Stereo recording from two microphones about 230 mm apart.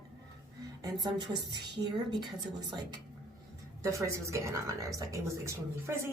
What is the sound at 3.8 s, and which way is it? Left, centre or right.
Speech, centre.